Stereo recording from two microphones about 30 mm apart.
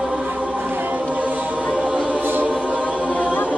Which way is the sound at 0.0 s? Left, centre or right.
Right.